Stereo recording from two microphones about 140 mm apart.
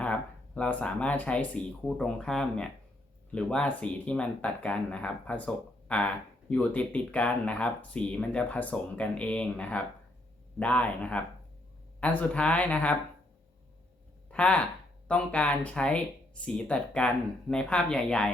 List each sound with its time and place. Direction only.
0.0 s speech: 10° left (ahead or behind)
14.3 s speech: 10° left (ahead or behind)